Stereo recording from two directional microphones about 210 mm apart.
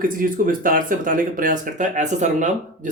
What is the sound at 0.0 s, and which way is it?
Speech, 40° right (ahead or behind).